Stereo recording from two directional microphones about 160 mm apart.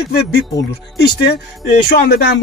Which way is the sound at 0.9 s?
80° left.